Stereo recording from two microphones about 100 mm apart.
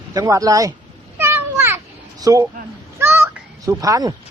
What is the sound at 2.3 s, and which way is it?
Speech, 35° right (ahead or behind).